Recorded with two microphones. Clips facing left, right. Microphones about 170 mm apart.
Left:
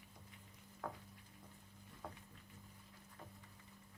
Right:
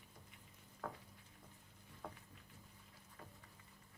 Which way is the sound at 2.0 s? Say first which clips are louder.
Even; 5° right (ahead or behind).